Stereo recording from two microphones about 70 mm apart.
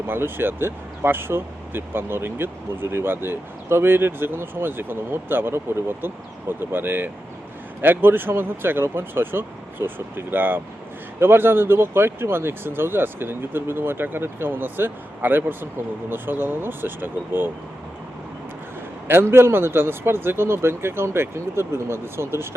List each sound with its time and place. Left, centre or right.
0.1 s speech: right
19.0 s speech: right